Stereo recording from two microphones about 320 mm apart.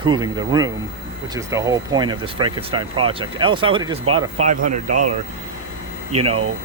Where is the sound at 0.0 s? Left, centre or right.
Centre.